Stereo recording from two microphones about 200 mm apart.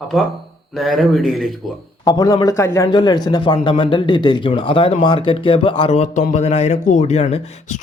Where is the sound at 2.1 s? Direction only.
20° left (ahead or behind).